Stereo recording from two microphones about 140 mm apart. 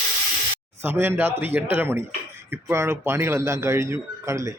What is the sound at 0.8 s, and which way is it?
Speech, 15° right (ahead or behind).